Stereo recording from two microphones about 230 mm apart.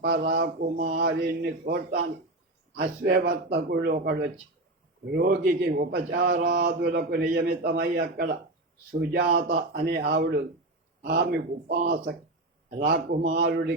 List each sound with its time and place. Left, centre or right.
0.0 s speech: right
1.2 s a man's voice: right